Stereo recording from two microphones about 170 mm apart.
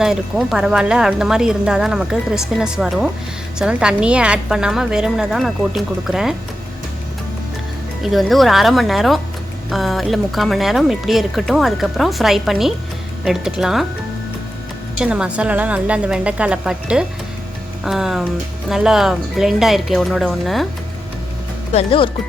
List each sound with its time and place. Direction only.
0.0 s speech: 5° right (ahead or behind)
8.0 s speech: centre (ahead or behind)
14.9 s a woman's voice: 5° right (ahead or behind)
21.7 s speech: 35° left (ahead or behind)